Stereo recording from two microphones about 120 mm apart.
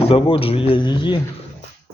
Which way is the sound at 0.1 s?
50° left (ahead or behind).